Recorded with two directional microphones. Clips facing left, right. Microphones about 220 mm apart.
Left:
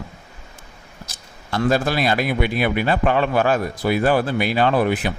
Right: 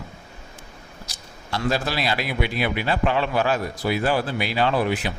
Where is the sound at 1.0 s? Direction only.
50° left (ahead or behind).